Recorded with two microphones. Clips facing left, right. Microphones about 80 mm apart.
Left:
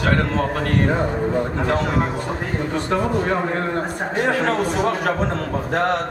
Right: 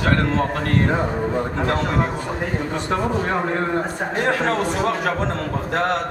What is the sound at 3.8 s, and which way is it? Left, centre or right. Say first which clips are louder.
A man's voice: even; centre.